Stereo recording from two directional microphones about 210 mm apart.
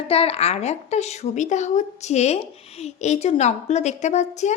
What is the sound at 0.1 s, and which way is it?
A woman's voice, 30° left (ahead or behind).